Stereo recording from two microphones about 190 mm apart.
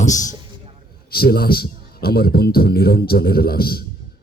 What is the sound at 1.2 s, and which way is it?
A man's voice, 55° left (ahead or behind).